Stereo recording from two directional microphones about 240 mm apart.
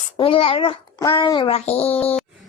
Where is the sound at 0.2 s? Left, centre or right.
Left.